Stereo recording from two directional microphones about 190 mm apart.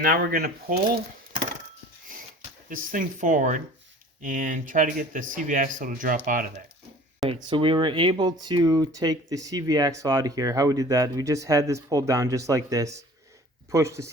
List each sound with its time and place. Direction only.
0.0 s speech: 50° right (ahead or behind)
2.6 s speech: 45° right (ahead or behind)
7.5 s speech: 25° right (ahead or behind)